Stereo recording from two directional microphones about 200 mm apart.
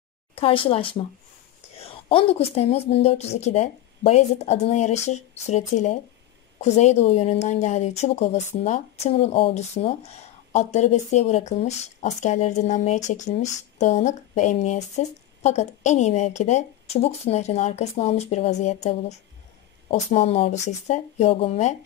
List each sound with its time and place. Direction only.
0.4 s speech: 25° left (ahead or behind)